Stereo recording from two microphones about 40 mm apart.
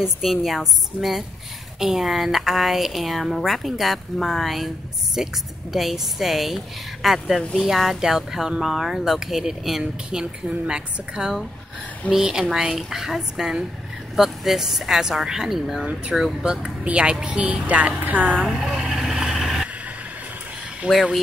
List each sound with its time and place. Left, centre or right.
0.0 s a woman's voice: centre
15.8 s speech: right
18.5 s vehicle: centre
19.3 s vehicle: centre
20.9 s speech: right